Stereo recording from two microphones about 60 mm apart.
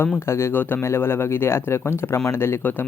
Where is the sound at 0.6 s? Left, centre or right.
Left.